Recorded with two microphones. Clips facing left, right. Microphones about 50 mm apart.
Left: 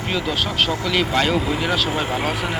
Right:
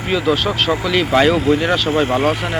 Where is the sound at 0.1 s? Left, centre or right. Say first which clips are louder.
Right 7 dB; centre.